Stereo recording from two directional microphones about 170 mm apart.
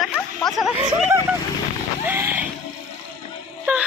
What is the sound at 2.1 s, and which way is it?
Music, 10° right (ahead or behind).